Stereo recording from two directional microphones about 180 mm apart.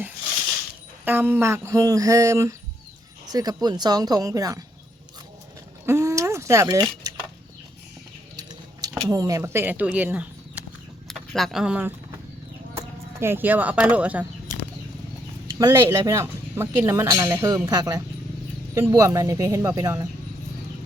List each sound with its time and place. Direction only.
1.0 s speech: 10° right (ahead or behind)
5.8 s a sound: 15° right (ahead or behind)
8.4 s speech: 20° right (ahead or behind)
11.1 s speech: centre (ahead or behind)
15.5 s speech: 20° right (ahead or behind)